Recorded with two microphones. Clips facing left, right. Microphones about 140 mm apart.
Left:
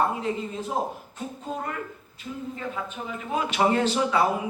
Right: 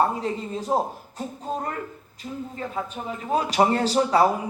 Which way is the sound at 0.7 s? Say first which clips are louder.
Right 6 dB; 40° right (ahead or behind).